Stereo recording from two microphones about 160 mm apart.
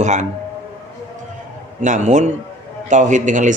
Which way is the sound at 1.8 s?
50° right (ahead or behind).